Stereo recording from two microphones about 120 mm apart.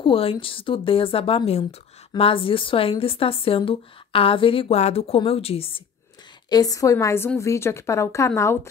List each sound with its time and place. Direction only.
0.0 s speech: 50° left (ahead or behind)
6.5 s speech: 30° left (ahead or behind)